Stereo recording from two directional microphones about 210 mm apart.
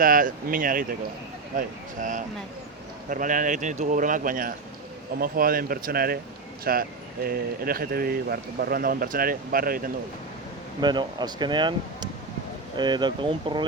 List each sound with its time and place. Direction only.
0.0 s speech: 40° right (ahead or behind)
10.8 s speech: 20° right (ahead or behind)